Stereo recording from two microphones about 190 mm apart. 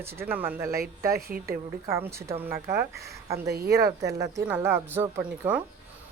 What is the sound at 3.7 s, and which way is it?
Speech, 15° right (ahead or behind).